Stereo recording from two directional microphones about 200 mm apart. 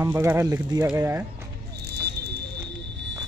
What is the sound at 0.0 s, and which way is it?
Speech, 15° right (ahead or behind).